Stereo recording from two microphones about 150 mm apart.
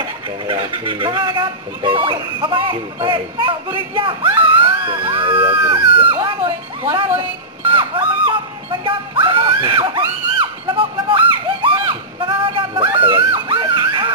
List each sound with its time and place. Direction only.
0.5 s speech: 35° right (ahead or behind)
7.6 s music: 35° right (ahead or behind)
13.1 s a sound: 35° right (ahead or behind)